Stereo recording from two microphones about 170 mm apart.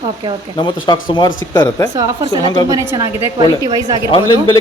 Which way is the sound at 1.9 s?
25° right (ahead or behind).